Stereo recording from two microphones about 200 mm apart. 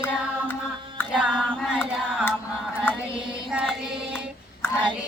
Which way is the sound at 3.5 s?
5° right (ahead or behind).